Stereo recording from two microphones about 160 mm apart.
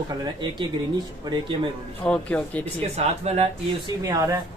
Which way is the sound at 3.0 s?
40° right (ahead or behind).